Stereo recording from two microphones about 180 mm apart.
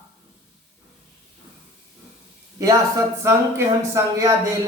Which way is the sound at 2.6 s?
15° right (ahead or behind).